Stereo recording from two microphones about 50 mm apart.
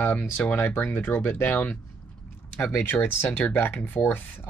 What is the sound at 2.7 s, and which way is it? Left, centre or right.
Speech, left.